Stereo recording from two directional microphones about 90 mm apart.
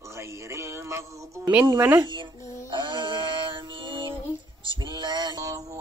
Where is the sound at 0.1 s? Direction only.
30° right (ahead or behind).